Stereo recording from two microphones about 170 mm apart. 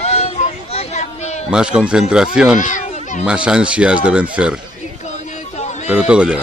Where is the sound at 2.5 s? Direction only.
50° left (ahead or behind).